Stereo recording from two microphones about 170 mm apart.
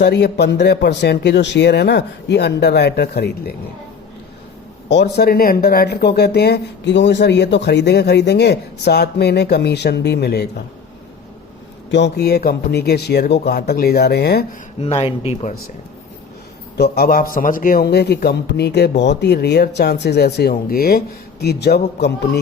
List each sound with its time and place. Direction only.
0.0 s speech: 75° left (ahead or behind)
4.9 s speech: 85° left
11.9 s speech: 90° left; by 14.4 s 70° left (ahead or behind)
14.8 s speech: 35° left (ahead or behind)
16.7 s speech: 65° left (ahead or behind)
21.4 s speech: 75° left (ahead or behind)